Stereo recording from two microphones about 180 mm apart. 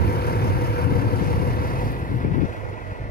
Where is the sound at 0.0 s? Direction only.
60° left (ahead or behind).